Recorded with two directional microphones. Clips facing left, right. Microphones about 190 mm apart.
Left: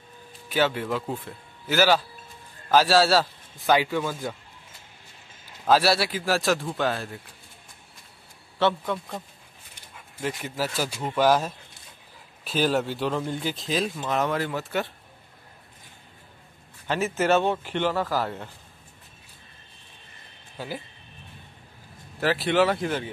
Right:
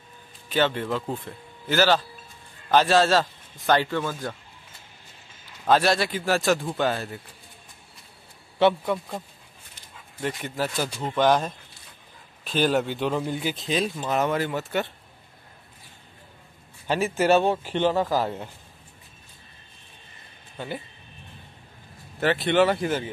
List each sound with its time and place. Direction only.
0.5 s a man's voice: 10° left (ahead or behind)
5.7 s speech: 5° left (ahead or behind)
8.5 s speech: 15° right (ahead or behind)
10.2 s speech: 5° left (ahead or behind)
17.1 s speech: 15° right (ahead or behind)
20.5 s speech: 5° left (ahead or behind)
22.2 s speech: centre (ahead or behind)